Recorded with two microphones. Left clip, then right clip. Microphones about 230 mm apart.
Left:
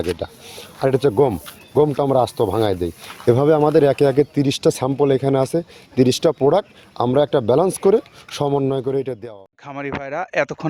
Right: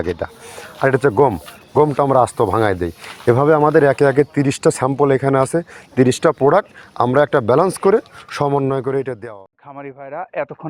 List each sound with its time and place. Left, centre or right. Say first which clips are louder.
0.0 s speech: right 1 dB; centre
0.9 s speech: right 2 dB; centre
9.6 s speech: left 5 dB; left